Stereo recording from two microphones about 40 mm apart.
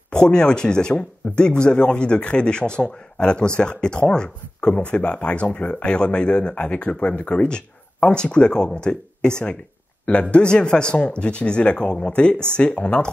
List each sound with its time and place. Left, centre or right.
0.1 s speech: left
10.3 s speech: left